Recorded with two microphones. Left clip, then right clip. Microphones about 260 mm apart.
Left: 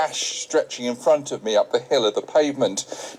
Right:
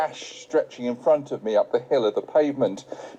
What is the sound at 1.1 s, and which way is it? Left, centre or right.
Speech, centre.